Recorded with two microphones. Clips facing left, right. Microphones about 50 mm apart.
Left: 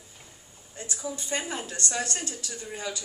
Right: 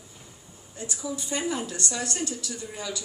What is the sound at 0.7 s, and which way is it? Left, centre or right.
Speech, left.